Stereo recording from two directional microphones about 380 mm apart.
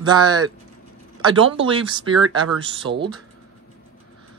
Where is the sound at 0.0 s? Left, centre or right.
Centre.